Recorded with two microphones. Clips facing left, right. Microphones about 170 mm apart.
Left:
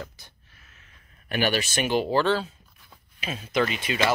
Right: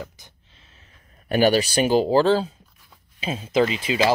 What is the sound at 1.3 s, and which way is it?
Speech, 35° right (ahead or behind).